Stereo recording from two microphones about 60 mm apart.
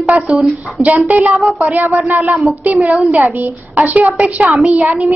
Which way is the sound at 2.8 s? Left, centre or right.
Right.